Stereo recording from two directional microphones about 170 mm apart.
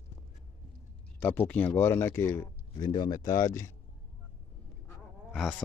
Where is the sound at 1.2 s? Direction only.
10° left (ahead or behind).